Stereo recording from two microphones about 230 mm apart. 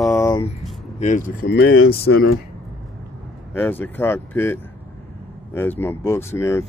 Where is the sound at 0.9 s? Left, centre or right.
Left.